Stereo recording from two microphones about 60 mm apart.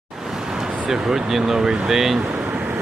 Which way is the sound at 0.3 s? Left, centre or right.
Centre.